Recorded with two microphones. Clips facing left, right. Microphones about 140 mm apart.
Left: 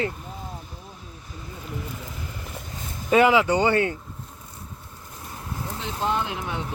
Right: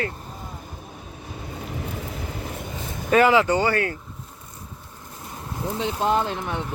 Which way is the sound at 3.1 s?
15° left (ahead or behind).